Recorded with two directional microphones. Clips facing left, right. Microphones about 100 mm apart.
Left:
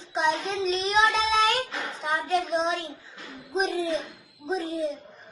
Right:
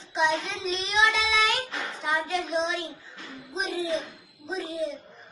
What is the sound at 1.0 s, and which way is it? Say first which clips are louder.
Child singing: right 1 dB; 40° left (ahead or behind).